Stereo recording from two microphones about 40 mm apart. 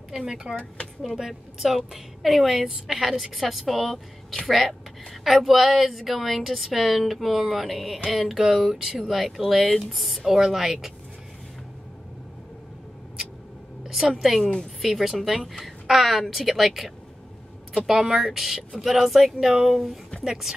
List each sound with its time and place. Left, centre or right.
0.3 s speech: right
1.0 s a sound: centre
2.2 s a woman's voice: centre
8.1 s a sound: centre
9.0 s a woman's voice: centre
14.1 s a woman's voice: centre
14.4 s speech: centre
14.8 s a woman's voice: centre
17.8 s a sound: centre
19.5 s a woman's voice: centre